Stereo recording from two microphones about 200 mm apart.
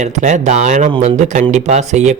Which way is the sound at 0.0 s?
35° right (ahead or behind).